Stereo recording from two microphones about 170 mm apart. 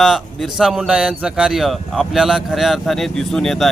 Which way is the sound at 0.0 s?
Centre (ahead or behind).